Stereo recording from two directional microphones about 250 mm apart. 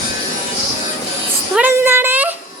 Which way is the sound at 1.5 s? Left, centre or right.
Centre.